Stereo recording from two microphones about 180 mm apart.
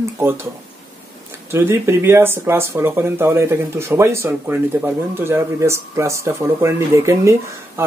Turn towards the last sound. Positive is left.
turn(degrees=-15)  # may be behind; listen again after turning